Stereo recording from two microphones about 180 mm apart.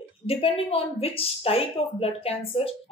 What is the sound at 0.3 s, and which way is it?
Speech, 30° left (ahead or behind).